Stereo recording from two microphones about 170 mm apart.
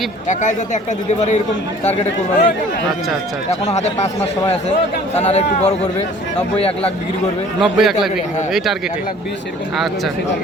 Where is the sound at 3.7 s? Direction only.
40° left (ahead or behind).